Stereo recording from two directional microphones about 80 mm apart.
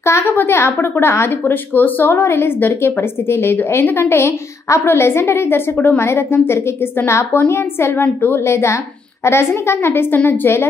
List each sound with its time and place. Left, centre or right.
0.0 s a woman's voice: left